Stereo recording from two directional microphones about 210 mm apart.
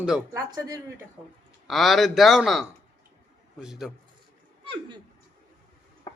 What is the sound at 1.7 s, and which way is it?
A man's voice, centre (ahead or behind).